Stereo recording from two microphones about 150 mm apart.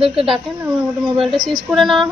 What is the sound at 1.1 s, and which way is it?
Speech, 30° right (ahead or behind).